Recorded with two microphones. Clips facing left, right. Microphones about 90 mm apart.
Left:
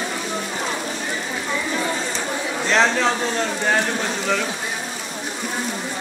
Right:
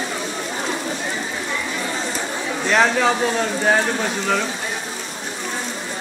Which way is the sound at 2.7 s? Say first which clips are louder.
Right 2 dB; 5° right (ahead or behind).